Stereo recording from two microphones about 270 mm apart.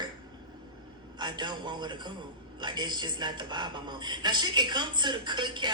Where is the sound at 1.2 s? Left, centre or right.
Centre.